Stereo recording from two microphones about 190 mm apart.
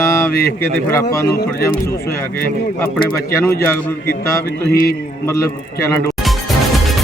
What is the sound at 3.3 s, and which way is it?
Speech, 15° left (ahead or behind).